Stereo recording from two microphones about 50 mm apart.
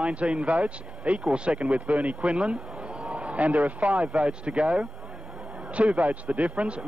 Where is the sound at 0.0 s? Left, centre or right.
Right.